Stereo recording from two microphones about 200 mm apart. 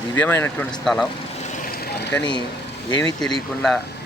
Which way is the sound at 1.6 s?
50° left (ahead or behind).